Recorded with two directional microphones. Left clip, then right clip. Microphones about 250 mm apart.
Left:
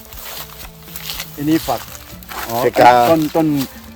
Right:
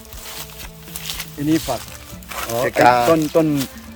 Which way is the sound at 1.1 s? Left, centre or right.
Centre.